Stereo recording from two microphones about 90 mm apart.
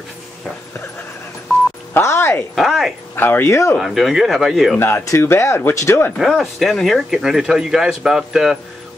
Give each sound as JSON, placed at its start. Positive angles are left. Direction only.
{"t": 2.0, "sound": "speech", "side_deg": 30}
{"t": 2.5, "sound": "speech", "side_deg": 0}
{"t": 3.2, "sound": "speech", "side_deg": 25}
{"t": 3.8, "sound": "speech", "side_deg": -5}
{"t": 4.7, "sound": "speech", "side_deg": 25}
{"t": 6.1, "sound": "speech", "side_deg": 0}